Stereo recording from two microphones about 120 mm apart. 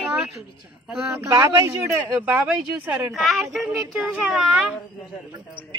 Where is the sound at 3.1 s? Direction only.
Centre (ahead or behind).